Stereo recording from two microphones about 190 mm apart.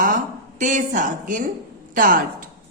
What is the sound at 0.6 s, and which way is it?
A woman's voice, 40° right (ahead or behind).